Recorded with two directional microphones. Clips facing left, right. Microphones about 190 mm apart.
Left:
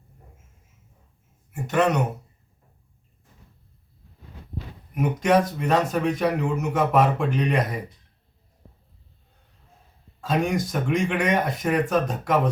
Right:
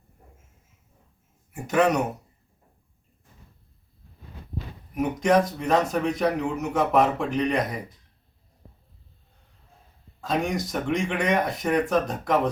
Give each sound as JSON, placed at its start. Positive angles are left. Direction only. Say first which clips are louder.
{"t": 1.7, "sound": "a man's voice", "louder": "right 1 dB", "side_deg": -5}
{"t": 4.9, "sound": "a man's voice", "louder": "left 1 dB", "side_deg": 5}
{"t": 10.2, "sound": "a man's voice", "louder": "left 2 dB", "side_deg": 0}